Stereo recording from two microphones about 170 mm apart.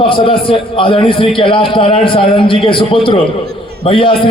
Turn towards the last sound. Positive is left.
turn(degrees=30)  # may be behind; listen again after turning